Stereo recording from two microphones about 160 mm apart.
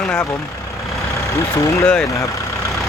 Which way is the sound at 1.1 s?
20° left (ahead or behind).